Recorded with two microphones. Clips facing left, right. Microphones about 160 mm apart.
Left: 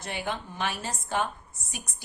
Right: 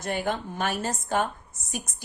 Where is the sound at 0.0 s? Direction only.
45° right (ahead or behind).